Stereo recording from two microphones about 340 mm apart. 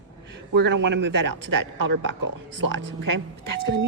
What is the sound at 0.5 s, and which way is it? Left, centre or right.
A woman's voice, right.